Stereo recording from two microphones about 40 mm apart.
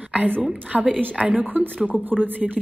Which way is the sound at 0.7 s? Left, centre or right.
Right.